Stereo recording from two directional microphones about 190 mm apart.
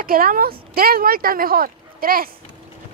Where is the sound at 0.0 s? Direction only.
50° right (ahead or behind).